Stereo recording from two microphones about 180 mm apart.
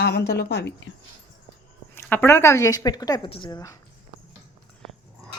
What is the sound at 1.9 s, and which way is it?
A woman's voice, 10° left (ahead or behind).